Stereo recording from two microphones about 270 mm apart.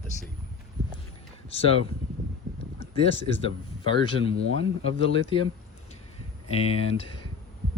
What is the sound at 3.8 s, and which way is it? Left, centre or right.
Speech, centre.